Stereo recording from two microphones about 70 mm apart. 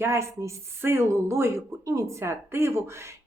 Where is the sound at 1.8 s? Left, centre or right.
Right.